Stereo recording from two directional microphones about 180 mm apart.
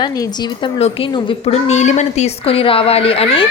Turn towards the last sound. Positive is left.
turn(degrees=30)  # may be behind; listen again after turning